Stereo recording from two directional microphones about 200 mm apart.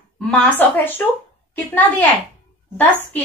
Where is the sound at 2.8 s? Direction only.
10° left (ahead or behind).